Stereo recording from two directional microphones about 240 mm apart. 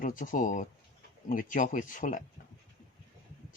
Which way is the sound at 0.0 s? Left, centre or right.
Left.